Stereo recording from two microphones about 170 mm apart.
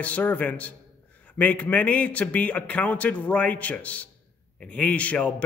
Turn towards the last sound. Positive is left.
turn(degrees=10)  # may be behind; listen again after turning